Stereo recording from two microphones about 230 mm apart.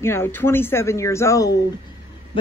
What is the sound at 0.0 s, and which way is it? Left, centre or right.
Speech, centre.